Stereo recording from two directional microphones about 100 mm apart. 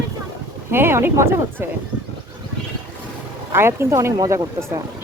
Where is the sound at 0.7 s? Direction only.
25° right (ahead or behind).